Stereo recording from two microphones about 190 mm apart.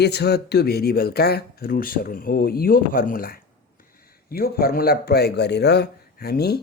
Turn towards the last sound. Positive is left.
turn(degrees=55)  # may be behind; listen again after turning